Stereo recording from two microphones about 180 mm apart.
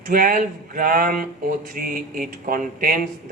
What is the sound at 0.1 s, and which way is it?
Speech, 50° right (ahead or behind).